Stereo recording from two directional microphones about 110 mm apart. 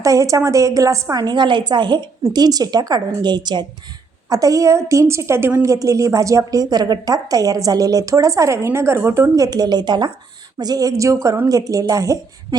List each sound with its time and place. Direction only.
0.0 s a woman's voice: 30° right (ahead or behind)
5.6 s a woman's voice: 30° right (ahead or behind)